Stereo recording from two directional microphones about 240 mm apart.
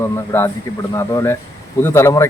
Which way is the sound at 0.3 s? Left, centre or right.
Centre.